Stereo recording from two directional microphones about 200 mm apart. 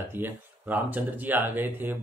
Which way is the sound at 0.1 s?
10° right (ahead or behind).